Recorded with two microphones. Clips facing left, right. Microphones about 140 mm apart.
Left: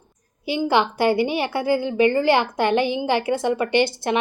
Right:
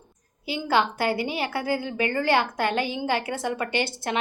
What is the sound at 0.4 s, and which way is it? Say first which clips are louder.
A woman's voice: left 4 dB; 20° left (ahead or behind).